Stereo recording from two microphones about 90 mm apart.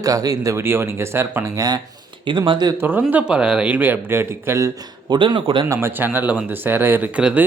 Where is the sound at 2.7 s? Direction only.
20° right (ahead or behind).